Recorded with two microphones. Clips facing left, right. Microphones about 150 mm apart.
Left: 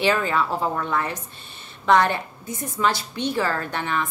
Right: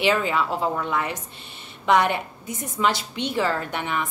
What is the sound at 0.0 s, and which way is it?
A woman's voice, 15° right (ahead or behind).